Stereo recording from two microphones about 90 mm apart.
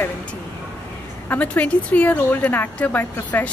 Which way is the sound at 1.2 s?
15° left (ahead or behind).